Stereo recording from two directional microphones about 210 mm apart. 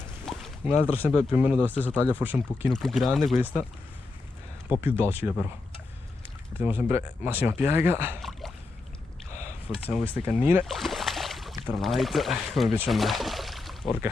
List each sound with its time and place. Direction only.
0.3 s a sound: centre (ahead or behind)
0.8 s speech: 25° left (ahead or behind)
1.1 s speech: 5° right (ahead or behind)
1.6 s speech: 5° left (ahead or behind)
2.1 s speech: 10° right (ahead or behind)
2.7 s speech: centre (ahead or behind)
4.6 s speech: 10° right (ahead or behind)
6.6 s speech: 10° right (ahead or behind)
8.2 s boat: centre (ahead or behind)
9.3 s a sound: 30° left (ahead or behind)
10.2 s speech: 10° right (ahead or behind)
10.6 s boat: centre (ahead or behind)
11.6 s speech: centre (ahead or behind)